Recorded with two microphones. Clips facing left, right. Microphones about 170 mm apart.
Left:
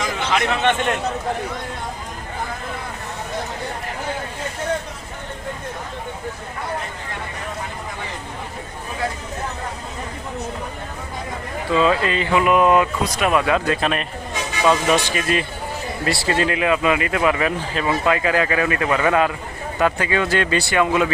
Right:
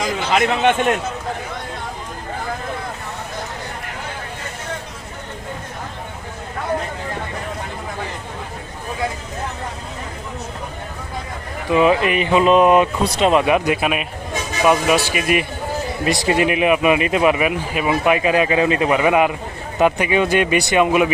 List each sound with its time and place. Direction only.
0.3 s speech: 10° right (ahead or behind)
11.7 s speech: 20° right (ahead or behind)